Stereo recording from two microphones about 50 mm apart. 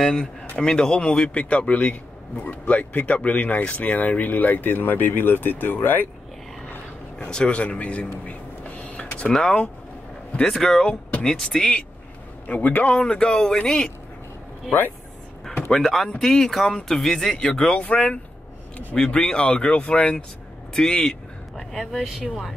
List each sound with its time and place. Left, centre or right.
0.6 s a man's voice: centre; by 6.0 s left
7.2 s speech: centre
8.3 s vehicle: left
9.3 s speech: centre
10.4 s speech: centre
12.4 s speech: left
13.0 s speech: centre
15.7 s speech: centre
21.5 s speech: centre